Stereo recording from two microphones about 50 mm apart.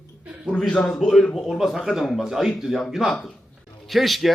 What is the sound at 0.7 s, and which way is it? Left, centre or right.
Speech, left.